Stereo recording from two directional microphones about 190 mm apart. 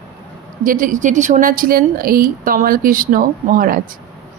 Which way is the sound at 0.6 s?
45° right (ahead or behind).